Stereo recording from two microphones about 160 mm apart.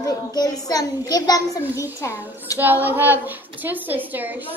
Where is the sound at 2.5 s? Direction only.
10° right (ahead or behind).